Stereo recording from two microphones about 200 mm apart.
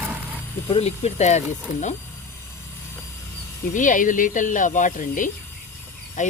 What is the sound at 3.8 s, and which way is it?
Speech, 40° left (ahead or behind).